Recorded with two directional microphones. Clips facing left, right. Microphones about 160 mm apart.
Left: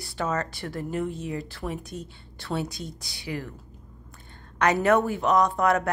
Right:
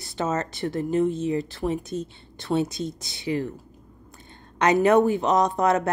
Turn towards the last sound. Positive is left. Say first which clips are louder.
# right 1 dB
turn(degrees=-20)  # may be behind; listen again after turning